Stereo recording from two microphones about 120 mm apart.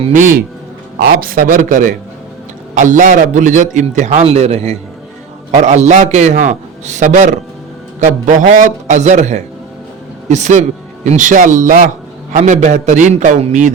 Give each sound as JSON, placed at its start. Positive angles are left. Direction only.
{"t": 0.1, "sound": "a man's voice", "side_deg": -90}
{"t": 1.5, "sound": "a man's voice", "side_deg": -90}
{"t": 5.6, "sound": "a man's voice", "side_deg": -75}